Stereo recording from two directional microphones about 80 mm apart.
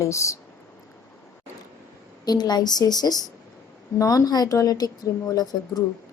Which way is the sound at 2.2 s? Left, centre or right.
Left.